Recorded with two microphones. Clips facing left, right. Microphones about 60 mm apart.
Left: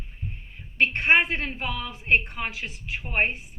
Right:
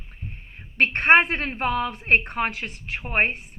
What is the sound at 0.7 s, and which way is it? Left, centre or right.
A woman's voice, right.